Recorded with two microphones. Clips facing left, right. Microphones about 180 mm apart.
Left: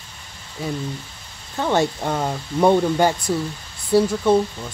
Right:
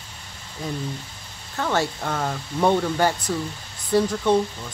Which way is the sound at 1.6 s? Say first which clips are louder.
Left 4 dB; 20° left (ahead or behind).